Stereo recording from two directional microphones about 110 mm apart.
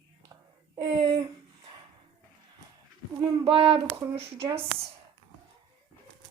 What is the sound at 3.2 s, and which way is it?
Speech, 55° right (ahead or behind).